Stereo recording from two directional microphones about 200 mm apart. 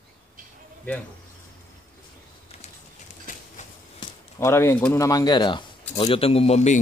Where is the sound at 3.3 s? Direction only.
40° left (ahead or behind).